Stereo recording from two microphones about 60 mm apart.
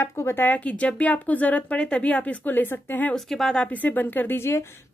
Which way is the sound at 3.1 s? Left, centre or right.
Centre.